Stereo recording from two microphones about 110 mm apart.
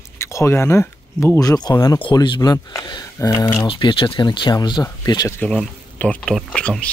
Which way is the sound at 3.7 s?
50° left (ahead or behind).